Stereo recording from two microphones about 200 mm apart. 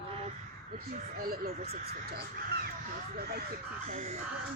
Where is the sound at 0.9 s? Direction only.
50° right (ahead or behind).